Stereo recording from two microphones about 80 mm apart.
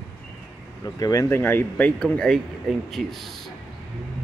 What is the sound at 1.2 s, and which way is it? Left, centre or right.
Speech, left.